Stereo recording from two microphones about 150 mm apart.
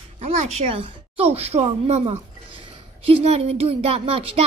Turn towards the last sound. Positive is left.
turn(degrees=-40)  # may be behind; listen again after turning